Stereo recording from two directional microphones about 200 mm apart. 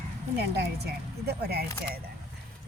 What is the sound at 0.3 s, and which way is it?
Speech, 55° right (ahead or behind).